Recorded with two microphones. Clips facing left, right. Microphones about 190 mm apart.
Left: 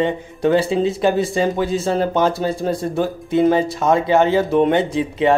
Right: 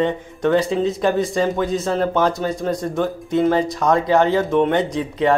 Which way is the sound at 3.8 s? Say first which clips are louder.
Left 1 dB; 5° left (ahead or behind).